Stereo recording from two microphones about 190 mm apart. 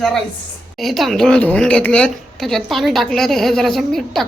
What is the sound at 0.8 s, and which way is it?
A woman's voice, centre (ahead or behind).